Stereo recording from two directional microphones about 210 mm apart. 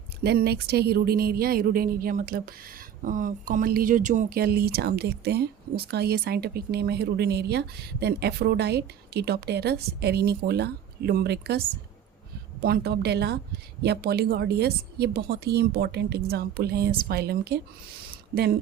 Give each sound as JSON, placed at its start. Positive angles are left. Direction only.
{"t": 0.2, "sound": "speech", "side_deg": -50}
{"t": 12.6, "sound": "speech", "side_deg": -50}